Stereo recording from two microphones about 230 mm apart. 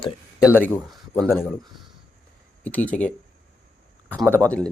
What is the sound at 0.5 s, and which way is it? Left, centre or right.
Speech, centre.